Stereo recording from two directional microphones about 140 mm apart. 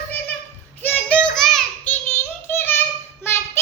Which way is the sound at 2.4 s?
15° left (ahead or behind).